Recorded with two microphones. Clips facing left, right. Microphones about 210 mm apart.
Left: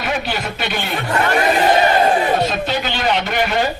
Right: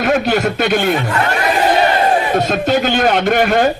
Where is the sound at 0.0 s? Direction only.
50° right (ahead or behind).